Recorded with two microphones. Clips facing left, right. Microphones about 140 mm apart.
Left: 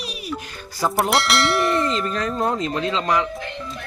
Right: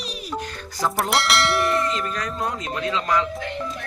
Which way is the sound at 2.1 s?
30° left (ahead or behind).